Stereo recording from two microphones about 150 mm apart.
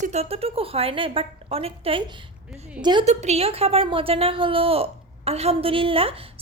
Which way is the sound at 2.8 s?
30° right (ahead or behind).